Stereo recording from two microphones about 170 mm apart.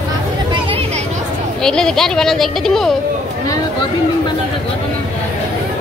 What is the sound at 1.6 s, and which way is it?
Speech, 5° left (ahead or behind).